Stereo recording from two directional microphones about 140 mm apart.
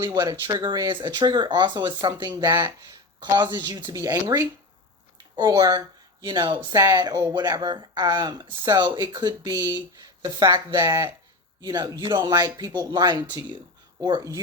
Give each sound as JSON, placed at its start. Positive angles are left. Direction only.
{"t": 0.1, "sound": "speech", "side_deg": -30}
{"t": 11.6, "sound": "speech", "side_deg": -30}